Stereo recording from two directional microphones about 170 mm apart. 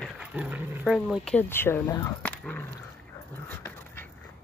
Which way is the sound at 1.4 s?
15° left (ahead or behind).